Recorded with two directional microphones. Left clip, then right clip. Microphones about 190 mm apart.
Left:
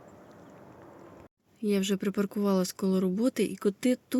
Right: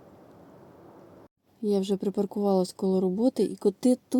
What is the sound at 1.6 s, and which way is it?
Speech, 5° right (ahead or behind).